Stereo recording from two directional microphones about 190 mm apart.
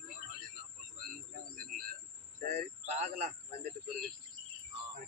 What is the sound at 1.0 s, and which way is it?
Bird, 50° right (ahead or behind).